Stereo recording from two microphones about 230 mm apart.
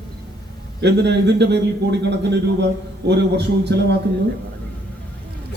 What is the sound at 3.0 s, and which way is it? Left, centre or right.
Speech, right.